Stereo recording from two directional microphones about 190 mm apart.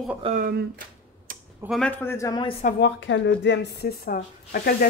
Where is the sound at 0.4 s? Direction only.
45° right (ahead or behind).